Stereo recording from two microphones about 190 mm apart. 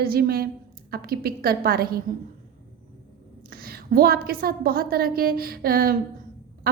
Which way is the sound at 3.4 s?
50° right (ahead or behind).